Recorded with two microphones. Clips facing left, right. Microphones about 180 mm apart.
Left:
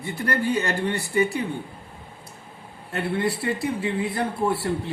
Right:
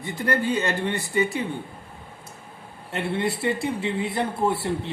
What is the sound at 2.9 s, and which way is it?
A man's voice, 20° right (ahead or behind).